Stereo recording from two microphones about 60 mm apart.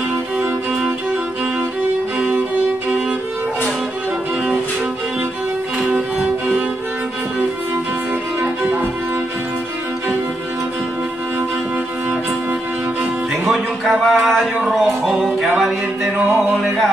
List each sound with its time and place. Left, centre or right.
8.4 s violin: right
13.4 s a sound: centre
14.7 s music: centre